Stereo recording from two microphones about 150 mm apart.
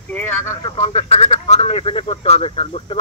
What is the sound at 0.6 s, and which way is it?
Speech, 35° left (ahead or behind).